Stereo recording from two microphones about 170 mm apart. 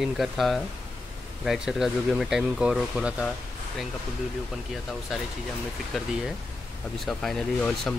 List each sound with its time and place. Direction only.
0.0 s speech: centre (ahead or behind)
5.1 s speech: centre (ahead or behind)